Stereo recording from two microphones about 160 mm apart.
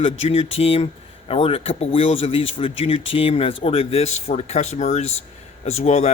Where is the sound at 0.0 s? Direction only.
35° left (ahead or behind).